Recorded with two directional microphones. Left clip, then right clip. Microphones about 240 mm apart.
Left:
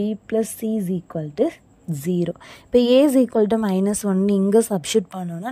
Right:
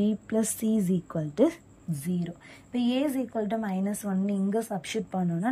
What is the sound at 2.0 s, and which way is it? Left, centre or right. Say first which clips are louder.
A woman's voice: left 13 dB; centre.